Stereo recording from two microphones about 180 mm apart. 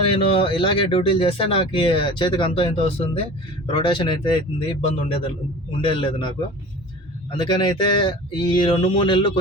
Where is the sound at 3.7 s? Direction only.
25° left (ahead or behind).